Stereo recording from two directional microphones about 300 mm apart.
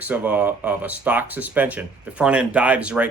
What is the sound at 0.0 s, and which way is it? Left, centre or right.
Speech, centre.